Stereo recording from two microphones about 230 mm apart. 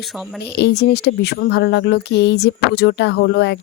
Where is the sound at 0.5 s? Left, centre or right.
Left.